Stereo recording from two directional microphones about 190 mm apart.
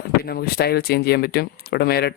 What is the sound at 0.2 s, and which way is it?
Speech, 55° left (ahead or behind).